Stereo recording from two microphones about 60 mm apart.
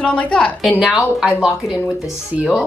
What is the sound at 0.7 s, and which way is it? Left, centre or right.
Speech, centre.